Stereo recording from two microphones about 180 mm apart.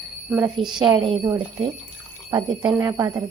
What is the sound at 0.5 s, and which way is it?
Speech, 25° right (ahead or behind).